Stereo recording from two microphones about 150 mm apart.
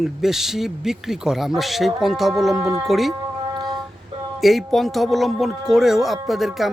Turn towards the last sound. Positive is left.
turn(degrees=0)  # may be behind; listen again after turning